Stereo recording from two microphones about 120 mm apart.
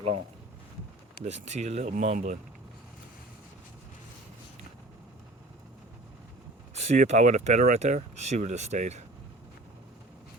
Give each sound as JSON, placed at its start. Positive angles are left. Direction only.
{"t": 1.2, "sound": "speech", "side_deg": -70}
{"t": 6.7, "sound": "speech", "side_deg": -75}